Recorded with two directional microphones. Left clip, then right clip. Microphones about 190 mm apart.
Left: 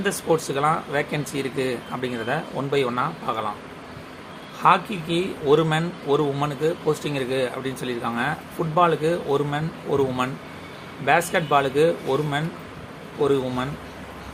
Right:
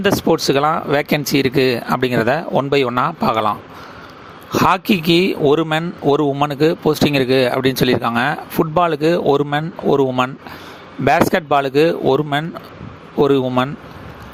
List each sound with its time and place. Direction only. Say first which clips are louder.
0.0 s speech: right 7 dB; 45° right (ahead or behind)
4.5 s speech: right 4 dB; 55° right (ahead or behind)